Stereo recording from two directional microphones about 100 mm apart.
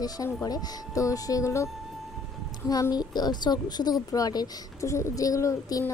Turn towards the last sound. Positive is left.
turn(degrees=35)  # may be behind; listen again after turning